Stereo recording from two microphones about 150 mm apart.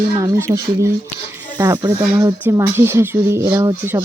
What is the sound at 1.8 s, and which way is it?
Speech, 20° right (ahead or behind).